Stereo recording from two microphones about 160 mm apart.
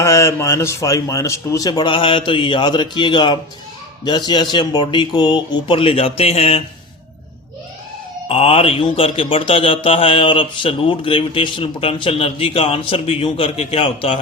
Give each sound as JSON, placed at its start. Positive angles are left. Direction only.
{"t": 0.0, "sound": "speech", "side_deg": 20}
{"t": 8.3, "sound": "speech", "side_deg": 35}